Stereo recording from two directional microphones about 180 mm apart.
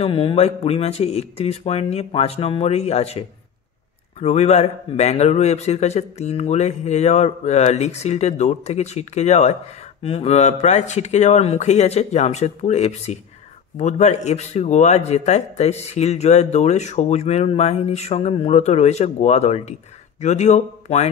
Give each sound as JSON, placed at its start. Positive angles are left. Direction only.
{"t": 0.0, "sound": "a man's voice", "side_deg": 30}